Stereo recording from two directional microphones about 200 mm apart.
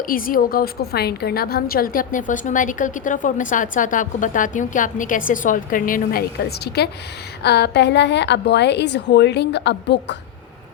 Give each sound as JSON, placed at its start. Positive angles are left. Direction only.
{"t": 0.0, "sound": "a woman's voice", "side_deg": 45}